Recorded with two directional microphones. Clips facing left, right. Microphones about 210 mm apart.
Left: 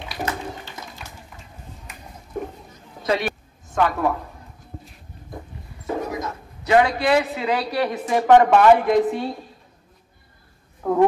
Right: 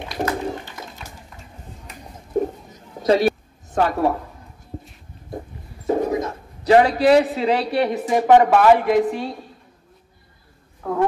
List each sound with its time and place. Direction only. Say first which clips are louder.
2.3 s a sound: right 8 dB; 35° right (ahead or behind)
5.9 s a man's voice: right 6 dB; 30° right (ahead or behind); by 9.3 s centre (ahead or behind)
10.8 s speech: left 4 dB; 20° left (ahead or behind)